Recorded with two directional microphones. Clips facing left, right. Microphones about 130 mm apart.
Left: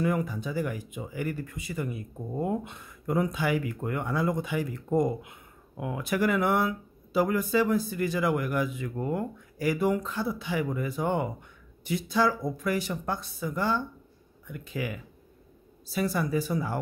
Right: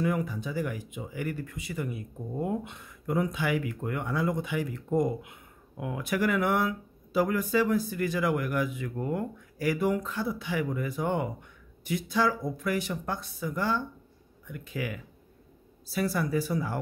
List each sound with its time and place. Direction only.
0.0 s speech: 45° left (ahead or behind); by 16.8 s 25° left (ahead or behind)